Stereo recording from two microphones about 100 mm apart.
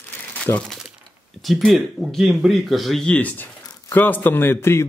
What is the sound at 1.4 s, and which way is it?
Speech, centre (ahead or behind).